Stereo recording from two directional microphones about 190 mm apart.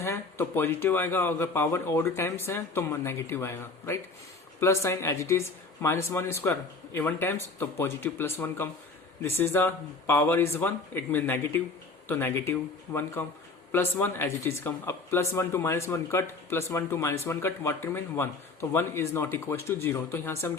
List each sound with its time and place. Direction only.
0.0 s speech: 15° left (ahead or behind)